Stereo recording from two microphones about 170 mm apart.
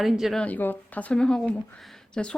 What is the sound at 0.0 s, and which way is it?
Speech, centre (ahead or behind).